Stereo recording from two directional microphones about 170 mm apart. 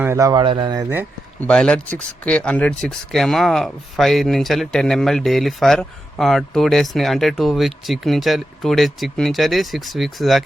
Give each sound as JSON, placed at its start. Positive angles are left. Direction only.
{"t": 0.0, "sound": "speech", "side_deg": -15}
{"t": 1.4, "sound": "speech", "side_deg": 5}